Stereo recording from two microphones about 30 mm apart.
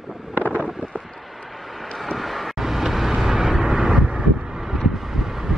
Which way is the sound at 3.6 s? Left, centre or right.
Right.